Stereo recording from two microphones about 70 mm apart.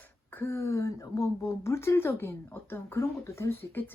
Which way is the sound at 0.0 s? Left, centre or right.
Left.